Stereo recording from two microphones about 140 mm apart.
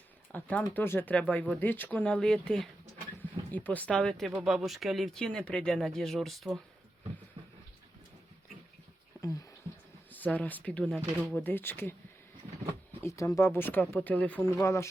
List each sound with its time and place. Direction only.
0.3 s speech: 10° left (ahead or behind)
10.1 s speech: 10° left (ahead or behind)
13.0 s speech: 20° left (ahead or behind)
14.6 s speech: 20° left (ahead or behind)